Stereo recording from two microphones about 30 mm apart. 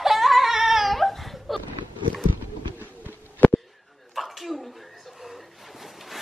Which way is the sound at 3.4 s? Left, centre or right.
Left.